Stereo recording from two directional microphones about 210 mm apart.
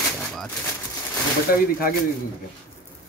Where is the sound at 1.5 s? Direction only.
45° left (ahead or behind).